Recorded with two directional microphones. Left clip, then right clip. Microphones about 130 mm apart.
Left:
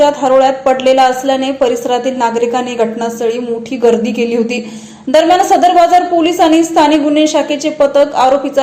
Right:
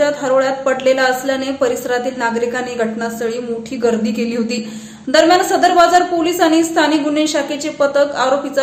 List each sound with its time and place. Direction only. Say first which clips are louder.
0.0 s a woman's voice: left 6 dB; 20° left (ahead or behind)
3.8 s a woman's voice: left 6 dB; 20° left (ahead or behind)